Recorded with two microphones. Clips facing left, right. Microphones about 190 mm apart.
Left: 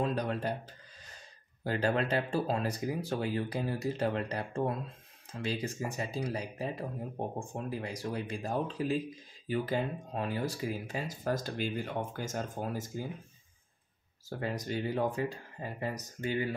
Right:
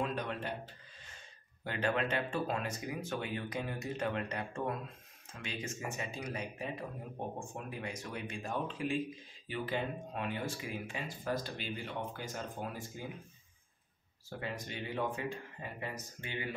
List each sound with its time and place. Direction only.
0.0 s speech: 35° left (ahead or behind)
14.4 s speech: 40° left (ahead or behind)